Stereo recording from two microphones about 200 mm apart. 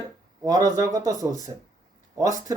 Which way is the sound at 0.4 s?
15° right (ahead or behind).